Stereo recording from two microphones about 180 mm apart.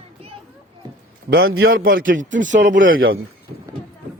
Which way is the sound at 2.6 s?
85° right.